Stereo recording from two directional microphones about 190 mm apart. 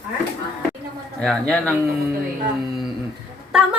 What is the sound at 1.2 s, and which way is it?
Speech, 5° left (ahead or behind).